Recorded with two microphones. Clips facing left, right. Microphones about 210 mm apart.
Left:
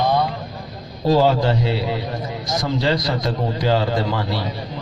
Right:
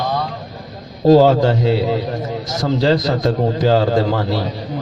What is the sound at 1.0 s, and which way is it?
A man's voice, 45° right (ahead or behind).